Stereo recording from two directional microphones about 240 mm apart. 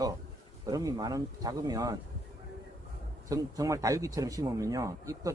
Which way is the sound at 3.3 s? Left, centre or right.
Centre.